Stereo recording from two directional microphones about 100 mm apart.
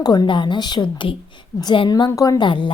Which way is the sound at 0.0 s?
45° left (ahead or behind).